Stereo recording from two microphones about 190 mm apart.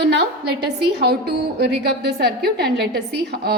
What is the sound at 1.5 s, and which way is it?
A woman's voice, 65° right (ahead or behind).